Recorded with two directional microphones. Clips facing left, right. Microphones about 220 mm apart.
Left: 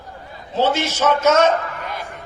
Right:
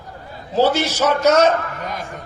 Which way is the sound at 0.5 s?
35° right (ahead or behind).